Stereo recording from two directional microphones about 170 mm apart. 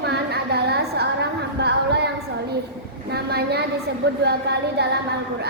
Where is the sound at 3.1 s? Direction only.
70° right (ahead or behind).